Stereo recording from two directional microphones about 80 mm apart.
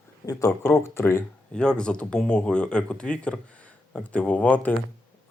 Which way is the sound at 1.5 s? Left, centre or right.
Centre.